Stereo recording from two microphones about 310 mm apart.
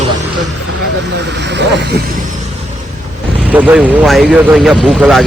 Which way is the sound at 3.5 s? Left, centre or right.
Centre.